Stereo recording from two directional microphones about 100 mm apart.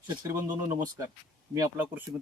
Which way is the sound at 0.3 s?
25° right (ahead or behind).